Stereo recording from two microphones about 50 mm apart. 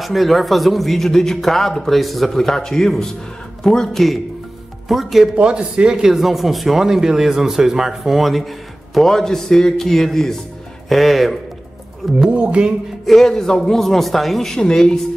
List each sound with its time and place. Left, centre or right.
0.0 s a man's voice: centre
5.3 s speech: centre
6.0 s a man's voice: centre
12.2 s speech: right
13.0 s speech: centre